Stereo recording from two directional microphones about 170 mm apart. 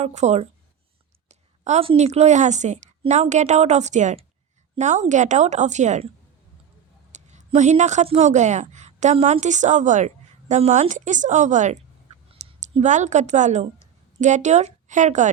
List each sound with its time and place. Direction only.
0.0 s a woman's voice: 40° right (ahead or behind)
7.1 s a woman's voice: 40° right (ahead or behind)